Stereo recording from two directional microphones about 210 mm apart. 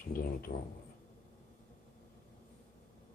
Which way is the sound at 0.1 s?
45° left (ahead or behind).